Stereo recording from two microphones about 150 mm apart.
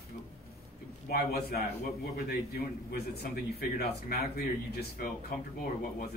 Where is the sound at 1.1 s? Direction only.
90° left.